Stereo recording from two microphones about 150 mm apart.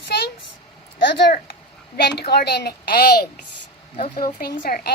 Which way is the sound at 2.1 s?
90° left.